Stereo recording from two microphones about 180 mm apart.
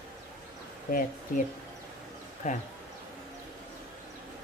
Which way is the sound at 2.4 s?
40° left (ahead or behind).